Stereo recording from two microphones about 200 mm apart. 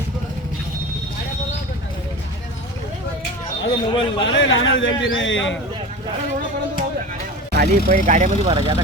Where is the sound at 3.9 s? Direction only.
25° left (ahead or behind).